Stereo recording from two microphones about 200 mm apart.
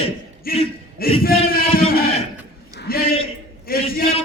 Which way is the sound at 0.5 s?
45° left (ahead or behind).